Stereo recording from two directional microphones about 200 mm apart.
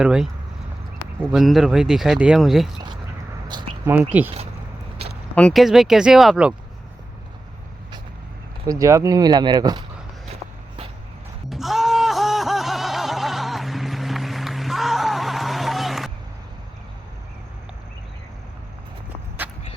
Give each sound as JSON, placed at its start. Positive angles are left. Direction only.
{"t": 0.0, "sound": "speech", "side_deg": -5}
{"t": 3.5, "sound": "speech", "side_deg": -20}
{"t": 4.1, "sound": "speech", "side_deg": -10}
{"t": 5.3, "sound": "speech", "side_deg": 5}
{"t": 8.6, "sound": "speech", "side_deg": -15}
{"t": 11.4, "sound": "music", "side_deg": 0}
{"t": 19.4, "sound": "a sound", "side_deg": -10}